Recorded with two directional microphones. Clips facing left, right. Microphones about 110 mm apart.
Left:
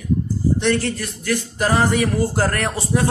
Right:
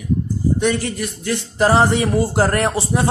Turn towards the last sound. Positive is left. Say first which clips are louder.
# right 3 dB
turn(degrees=-20)  # may be behind; listen again after turning